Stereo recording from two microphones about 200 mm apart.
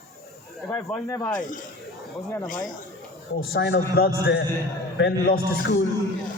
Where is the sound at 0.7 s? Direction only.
10° left (ahead or behind).